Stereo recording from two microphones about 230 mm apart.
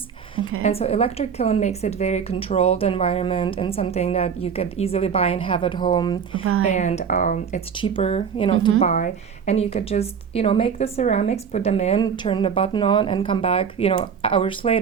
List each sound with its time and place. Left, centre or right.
0.6 s a woman's voice: left
6.4 s speech: right
6.7 s speech: left
7.8 s a woman's voice: left
8.8 s a woman's voice: left